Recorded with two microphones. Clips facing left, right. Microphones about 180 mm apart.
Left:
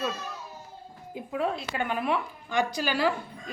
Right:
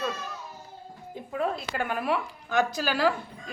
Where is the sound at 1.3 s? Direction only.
Centre (ahead or behind).